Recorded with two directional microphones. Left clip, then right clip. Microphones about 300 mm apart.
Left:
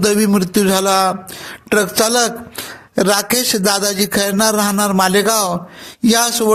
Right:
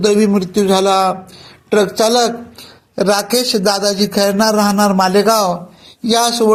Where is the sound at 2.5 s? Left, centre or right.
Left.